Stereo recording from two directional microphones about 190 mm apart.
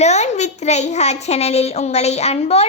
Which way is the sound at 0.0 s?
35° left (ahead or behind).